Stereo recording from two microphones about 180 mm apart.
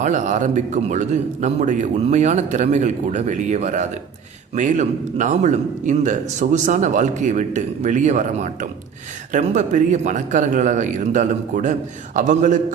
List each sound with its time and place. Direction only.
0.0 s a man's voice: 40° right (ahead or behind)